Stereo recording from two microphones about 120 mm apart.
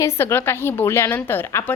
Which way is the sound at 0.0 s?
20° left (ahead or behind).